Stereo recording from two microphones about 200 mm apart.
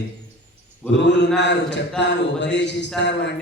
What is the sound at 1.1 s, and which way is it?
Mantra, 60° left (ahead or behind).